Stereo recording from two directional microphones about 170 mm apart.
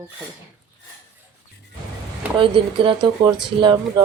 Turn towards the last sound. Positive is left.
turn(degrees=-25)  # may be behind; listen again after turning